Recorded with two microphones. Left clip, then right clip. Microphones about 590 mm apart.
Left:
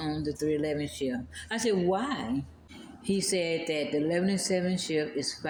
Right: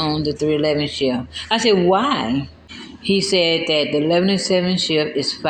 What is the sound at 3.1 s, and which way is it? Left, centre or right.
Speech, left.